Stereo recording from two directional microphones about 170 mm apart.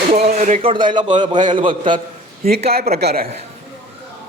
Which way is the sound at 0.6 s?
30° right (ahead or behind).